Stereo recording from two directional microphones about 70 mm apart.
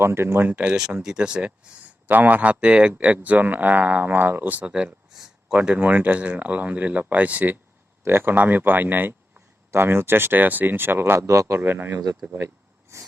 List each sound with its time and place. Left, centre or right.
0.0 s a man's voice: right
0.5 s speech: centre
5.1 s a sound: centre
5.5 s a man's voice: centre; by 11.6 s right
11.6 s a man's voice: right
12.9 s a sound: right